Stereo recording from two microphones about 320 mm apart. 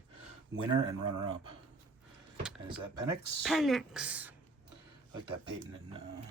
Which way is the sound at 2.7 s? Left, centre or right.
Right.